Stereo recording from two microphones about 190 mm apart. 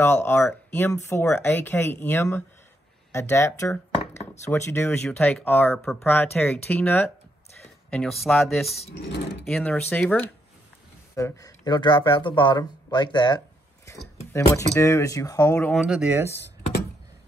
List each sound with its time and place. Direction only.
0.0 s speech: 10° left (ahead or behind)
8.6 s speech: 35° left (ahead or behind)
9.5 s speech: 5° left (ahead or behind)
11.1 s speech: 15° left (ahead or behind)
15.7 s speech: centre (ahead or behind)